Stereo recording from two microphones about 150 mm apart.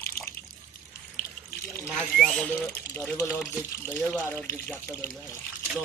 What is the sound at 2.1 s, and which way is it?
Speech, 5° left (ahead or behind).